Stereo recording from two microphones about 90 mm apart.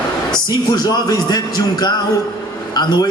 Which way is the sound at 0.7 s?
45° left (ahead or behind).